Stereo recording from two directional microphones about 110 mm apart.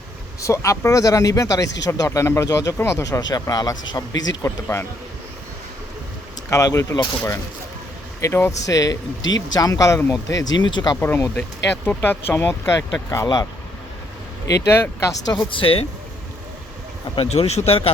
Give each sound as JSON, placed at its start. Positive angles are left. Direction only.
{"t": 0.4, "sound": "speech", "side_deg": 30}
{"t": 6.5, "sound": "speech", "side_deg": 30}
{"t": 8.2, "sound": "speech", "side_deg": 25}
{"t": 11.0, "sound": "speech", "side_deg": 20}
{"t": 13.2, "sound": "speech", "side_deg": 35}
{"t": 14.7, "sound": "speech", "side_deg": 20}
{"t": 15.3, "sound": "speech", "side_deg": 45}
{"t": 17.2, "sound": "speech", "side_deg": 70}